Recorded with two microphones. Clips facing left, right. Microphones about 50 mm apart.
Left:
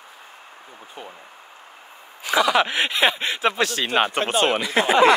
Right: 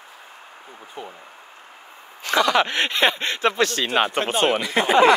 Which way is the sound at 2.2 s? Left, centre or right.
Centre.